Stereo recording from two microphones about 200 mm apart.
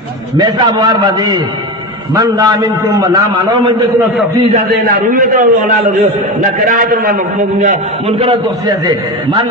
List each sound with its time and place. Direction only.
0.4 s a man's voice: 20° right (ahead or behind)
4.6 s a man's voice: 45° right (ahead or behind)
8.1 s a man's voice: 25° right (ahead or behind)